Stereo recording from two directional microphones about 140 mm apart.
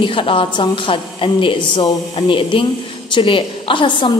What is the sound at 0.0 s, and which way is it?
A woman's voice, 40° left (ahead or behind).